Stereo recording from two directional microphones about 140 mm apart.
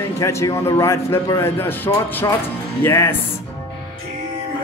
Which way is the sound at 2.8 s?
15° left (ahead or behind).